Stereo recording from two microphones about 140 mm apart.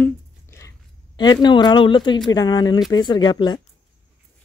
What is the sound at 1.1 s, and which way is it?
Speech, 30° left (ahead or behind).